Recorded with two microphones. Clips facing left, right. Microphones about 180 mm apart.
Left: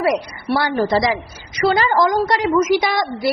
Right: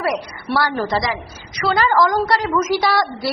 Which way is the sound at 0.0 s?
15° left (ahead or behind).